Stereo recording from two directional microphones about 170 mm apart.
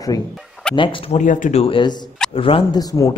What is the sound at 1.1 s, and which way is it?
Speech, 50° left (ahead or behind).